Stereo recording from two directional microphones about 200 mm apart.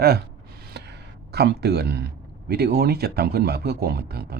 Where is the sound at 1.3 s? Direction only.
55° right (ahead or behind).